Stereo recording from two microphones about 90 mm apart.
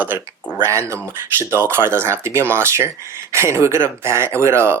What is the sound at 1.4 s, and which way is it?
Speech, 25° right (ahead or behind).